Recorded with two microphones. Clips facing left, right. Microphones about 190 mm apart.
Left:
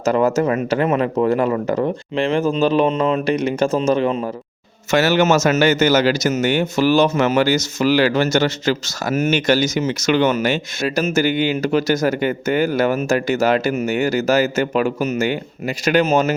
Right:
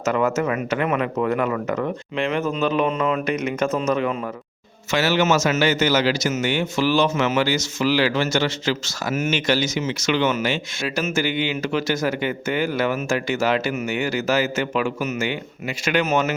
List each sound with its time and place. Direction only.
0.0 s a man's voice: 35° left (ahead or behind)
4.9 s a man's voice: 45° left (ahead or behind)